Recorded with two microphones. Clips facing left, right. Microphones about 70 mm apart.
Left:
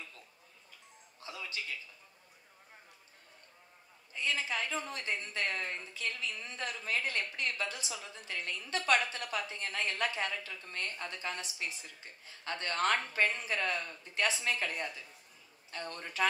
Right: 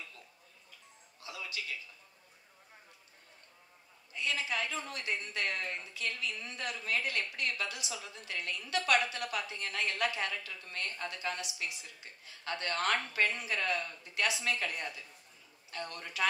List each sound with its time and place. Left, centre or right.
1.2 s music: left
4.1 s speech: left